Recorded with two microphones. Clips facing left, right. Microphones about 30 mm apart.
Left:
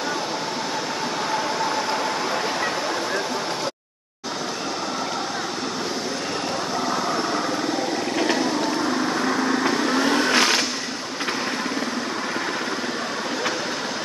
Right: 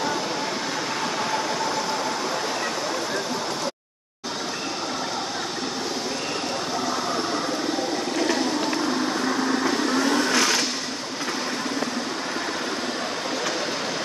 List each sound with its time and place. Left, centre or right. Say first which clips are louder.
9.6 s vehicle: left 2 dB; left